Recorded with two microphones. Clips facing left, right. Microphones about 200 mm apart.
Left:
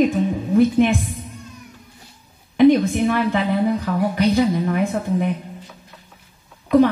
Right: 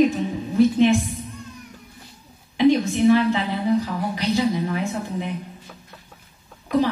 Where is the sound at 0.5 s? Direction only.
55° left (ahead or behind).